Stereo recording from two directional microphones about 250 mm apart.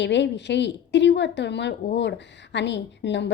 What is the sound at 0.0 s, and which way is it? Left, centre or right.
A woman's voice, left.